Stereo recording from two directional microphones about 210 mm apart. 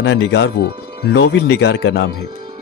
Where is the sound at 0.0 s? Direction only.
60° left (ahead or behind).